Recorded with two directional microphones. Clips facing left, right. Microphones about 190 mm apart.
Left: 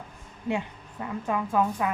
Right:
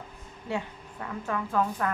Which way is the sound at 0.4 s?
15° left (ahead or behind).